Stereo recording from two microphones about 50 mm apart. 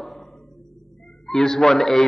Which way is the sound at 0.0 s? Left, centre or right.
Centre.